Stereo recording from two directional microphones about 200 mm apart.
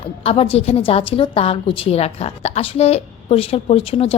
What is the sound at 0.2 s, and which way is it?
A woman's voice, 30° left (ahead or behind).